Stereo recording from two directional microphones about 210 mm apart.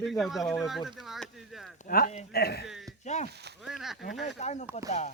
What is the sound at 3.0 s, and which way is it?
Speech, 35° left (ahead or behind).